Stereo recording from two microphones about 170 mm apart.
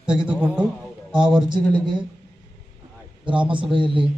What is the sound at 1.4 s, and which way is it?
Speech, 25° right (ahead or behind).